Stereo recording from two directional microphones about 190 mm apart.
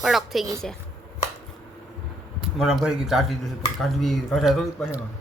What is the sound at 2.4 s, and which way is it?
Speech, centre (ahead or behind).